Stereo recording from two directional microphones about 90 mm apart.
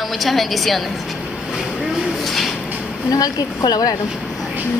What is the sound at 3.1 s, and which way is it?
Speech, 45° left (ahead or behind).